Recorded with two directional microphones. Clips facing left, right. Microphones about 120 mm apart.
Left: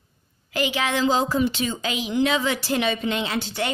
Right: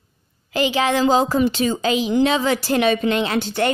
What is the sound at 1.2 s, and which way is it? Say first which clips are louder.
A woman's voice: right 4 dB; 55° right (ahead or behind).